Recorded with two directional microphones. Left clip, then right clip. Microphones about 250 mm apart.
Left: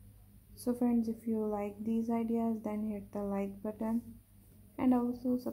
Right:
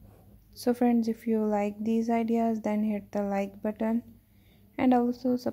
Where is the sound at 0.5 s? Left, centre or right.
Right.